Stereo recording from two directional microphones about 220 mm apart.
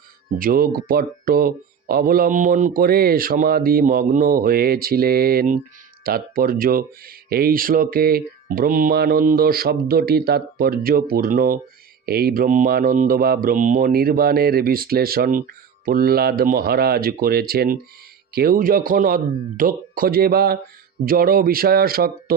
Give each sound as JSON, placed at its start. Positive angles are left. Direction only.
{"t": 0.3, "sound": "speech", "side_deg": -40}